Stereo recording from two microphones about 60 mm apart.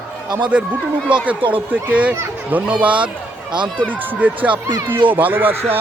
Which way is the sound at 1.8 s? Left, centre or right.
Right.